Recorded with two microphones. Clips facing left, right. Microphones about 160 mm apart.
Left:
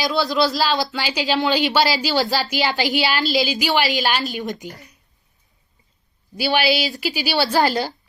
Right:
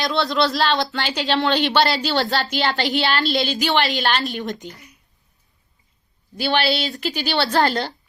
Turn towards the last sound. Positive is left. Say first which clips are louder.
# left 1 dB
turn(degrees=5)  # may be behind; listen again after turning